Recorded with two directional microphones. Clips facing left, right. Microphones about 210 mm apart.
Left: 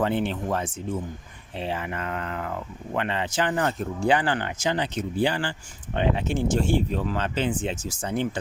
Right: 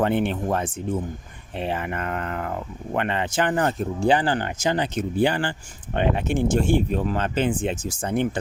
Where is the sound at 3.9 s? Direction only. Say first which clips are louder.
Right 2 dB; 30° right (ahead or behind); by 8.4 s 55° right (ahead or behind).